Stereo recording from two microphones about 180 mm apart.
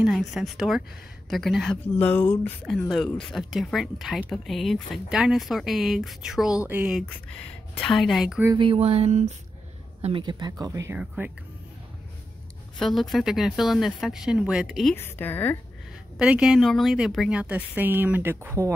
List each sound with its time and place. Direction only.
0.0 s a woman's voice: centre (ahead or behind)
7.0 s speech: 5° left (ahead or behind)
8.5 s a sound: 30° right (ahead or behind)
10.0 s a woman's voice: 25° right (ahead or behind); by 11.3 s 10° right (ahead or behind)
12.7 s speech: centre (ahead or behind)
15.0 s speech: 10° left (ahead or behind)
16.2 s a woman's voice: 5° right (ahead or behind)